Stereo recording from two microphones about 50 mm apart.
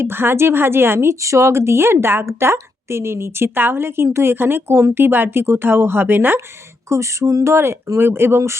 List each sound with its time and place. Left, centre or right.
0.0 s speech: right
6.8 s speech: right